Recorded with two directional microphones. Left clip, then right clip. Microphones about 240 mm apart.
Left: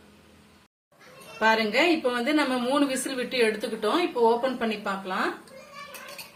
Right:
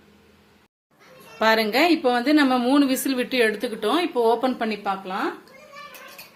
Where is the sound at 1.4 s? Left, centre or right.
Right.